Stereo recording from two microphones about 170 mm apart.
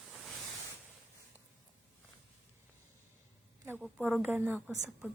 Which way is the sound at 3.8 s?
5° right (ahead or behind).